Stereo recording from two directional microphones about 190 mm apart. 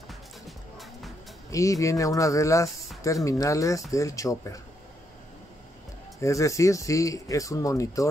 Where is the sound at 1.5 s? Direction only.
15° left (ahead or behind).